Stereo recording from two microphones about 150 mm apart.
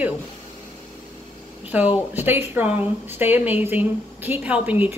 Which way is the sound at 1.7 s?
15° right (ahead or behind).